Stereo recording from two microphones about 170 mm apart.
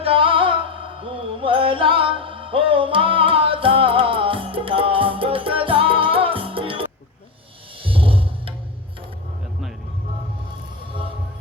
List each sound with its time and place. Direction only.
0.0 s music: 30° right (ahead or behind)